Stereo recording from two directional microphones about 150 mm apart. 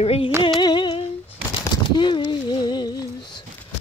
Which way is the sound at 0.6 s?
30° left (ahead or behind).